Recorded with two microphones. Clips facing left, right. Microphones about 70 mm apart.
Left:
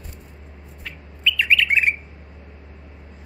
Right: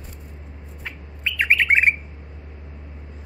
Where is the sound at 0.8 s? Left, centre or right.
Right.